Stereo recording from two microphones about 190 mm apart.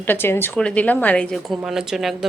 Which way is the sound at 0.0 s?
10° left (ahead or behind).